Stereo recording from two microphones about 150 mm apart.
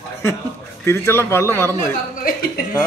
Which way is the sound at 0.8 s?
15° left (ahead or behind).